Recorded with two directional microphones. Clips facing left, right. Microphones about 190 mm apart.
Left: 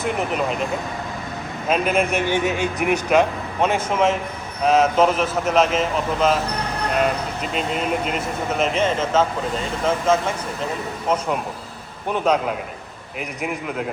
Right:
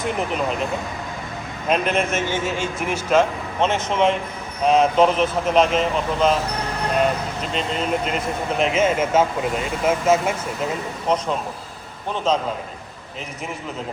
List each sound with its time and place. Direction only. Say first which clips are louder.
0.0 s speech: left 1 dB; 5° left (ahead or behind)
2.4 s speech: left 3 dB; 65° left (ahead or behind)
2.9 s a man's voice: even; 15° left (ahead or behind)
7.4 s speech: left 1 dB; 5° left (ahead or behind)
12.1 s a man's voice: left 2 dB; 10° left (ahead or behind)